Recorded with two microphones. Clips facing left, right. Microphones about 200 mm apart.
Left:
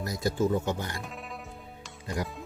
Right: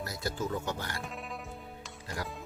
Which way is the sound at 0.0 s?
15° left (ahead or behind).